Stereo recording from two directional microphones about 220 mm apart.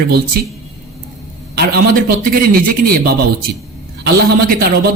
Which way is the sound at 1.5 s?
45° right (ahead or behind).